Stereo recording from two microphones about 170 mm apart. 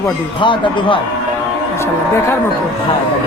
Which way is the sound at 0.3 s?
30° left (ahead or behind).